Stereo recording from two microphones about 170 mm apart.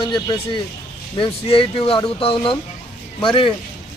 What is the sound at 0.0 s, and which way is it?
A man's voice, 25° left (ahead or behind).